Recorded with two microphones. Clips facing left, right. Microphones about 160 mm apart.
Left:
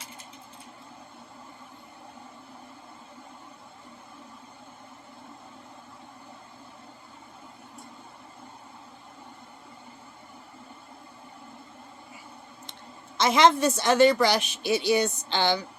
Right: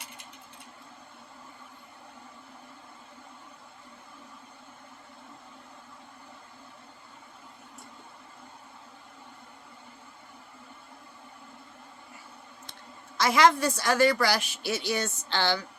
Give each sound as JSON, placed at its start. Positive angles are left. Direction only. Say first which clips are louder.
{"t": 13.1, "sound": "a woman's voice", "louder": "left 2 dB", "side_deg": 20}